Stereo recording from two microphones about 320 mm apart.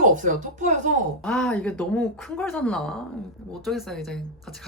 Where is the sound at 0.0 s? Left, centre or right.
Right.